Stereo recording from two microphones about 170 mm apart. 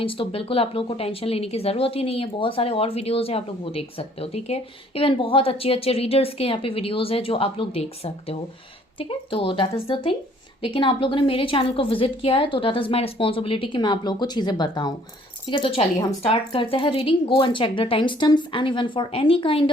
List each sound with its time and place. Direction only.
0.0 s speech: 30° left (ahead or behind)